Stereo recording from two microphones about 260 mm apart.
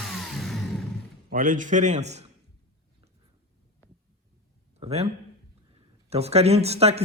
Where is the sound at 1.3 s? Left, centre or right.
Right.